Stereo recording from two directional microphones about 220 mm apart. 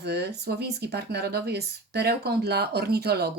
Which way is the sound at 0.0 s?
50° right (ahead or behind).